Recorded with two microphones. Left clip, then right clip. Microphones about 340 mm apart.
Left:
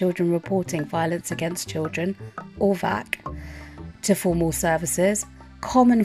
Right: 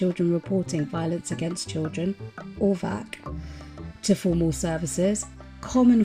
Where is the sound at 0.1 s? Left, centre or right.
Left.